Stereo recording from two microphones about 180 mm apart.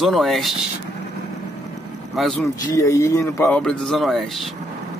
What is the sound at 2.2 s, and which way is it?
Speech, 5° left (ahead or behind).